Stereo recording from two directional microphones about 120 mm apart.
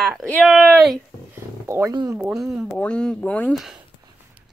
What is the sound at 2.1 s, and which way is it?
Speech, 5° right (ahead or behind).